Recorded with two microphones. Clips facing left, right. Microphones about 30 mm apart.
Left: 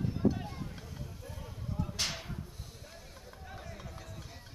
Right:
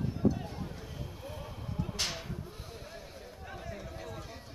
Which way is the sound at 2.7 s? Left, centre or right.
Centre.